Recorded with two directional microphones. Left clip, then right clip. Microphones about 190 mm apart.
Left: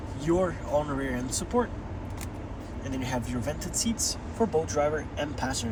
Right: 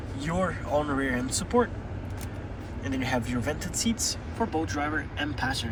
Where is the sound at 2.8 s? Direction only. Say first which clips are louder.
Right 4 dB; 20° left (ahead or behind).